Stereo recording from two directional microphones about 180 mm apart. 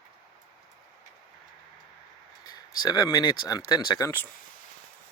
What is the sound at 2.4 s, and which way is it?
Speech, 20° left (ahead or behind).